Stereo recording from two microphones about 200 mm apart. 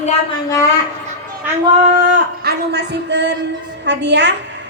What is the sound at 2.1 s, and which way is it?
A man's voice, 55° right (ahead or behind).